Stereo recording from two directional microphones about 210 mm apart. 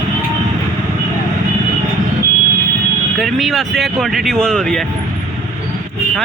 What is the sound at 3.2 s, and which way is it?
Speech, centre (ahead or behind).